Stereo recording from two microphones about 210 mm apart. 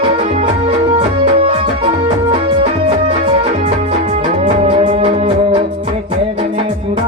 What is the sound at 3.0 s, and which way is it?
Music, 25° right (ahead or behind).